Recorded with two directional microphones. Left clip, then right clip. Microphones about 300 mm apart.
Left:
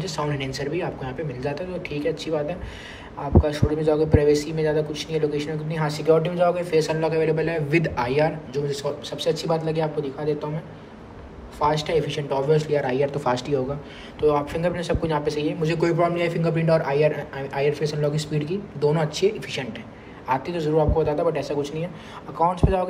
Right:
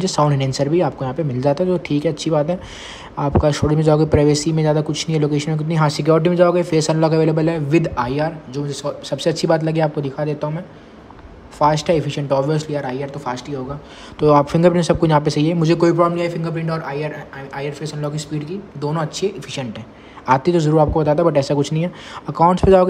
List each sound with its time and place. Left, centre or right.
0.0 s a man's voice: centre
9.1 s speech: right
11.5 s a man's voice: centre
14.2 s a man's voice: centre
20.2 s speech: right